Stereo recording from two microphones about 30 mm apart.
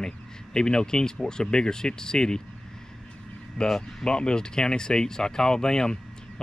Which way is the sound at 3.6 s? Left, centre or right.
Left.